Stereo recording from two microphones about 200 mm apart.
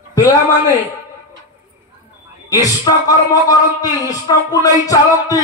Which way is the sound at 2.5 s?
20° left (ahead or behind).